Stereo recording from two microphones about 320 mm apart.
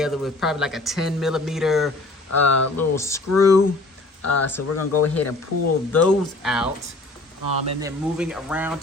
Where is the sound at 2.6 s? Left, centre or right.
Left.